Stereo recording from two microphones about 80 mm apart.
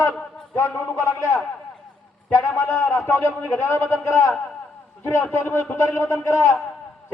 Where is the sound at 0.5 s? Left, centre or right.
Left.